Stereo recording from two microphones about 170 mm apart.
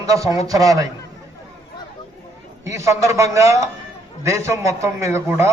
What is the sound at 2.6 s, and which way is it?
A man's voice, 15° right (ahead or behind).